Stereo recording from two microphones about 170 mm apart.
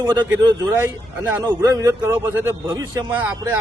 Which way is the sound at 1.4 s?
20° right (ahead or behind).